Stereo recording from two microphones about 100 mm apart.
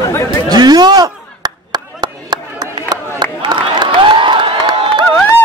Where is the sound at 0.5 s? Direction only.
45° right (ahead or behind).